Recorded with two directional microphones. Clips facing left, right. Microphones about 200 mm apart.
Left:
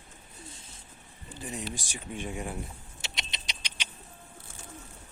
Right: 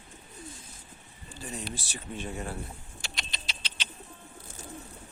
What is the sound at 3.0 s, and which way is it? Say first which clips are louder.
Rodents: left 1 dB; 20° left (ahead or behind).